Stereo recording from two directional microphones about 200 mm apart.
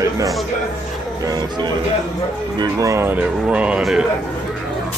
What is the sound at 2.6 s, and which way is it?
Speech, 15° right (ahead or behind).